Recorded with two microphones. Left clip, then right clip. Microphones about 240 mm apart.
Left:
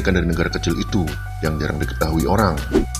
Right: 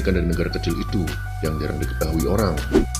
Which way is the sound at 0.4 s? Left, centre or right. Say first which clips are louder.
Left 3 dB; left.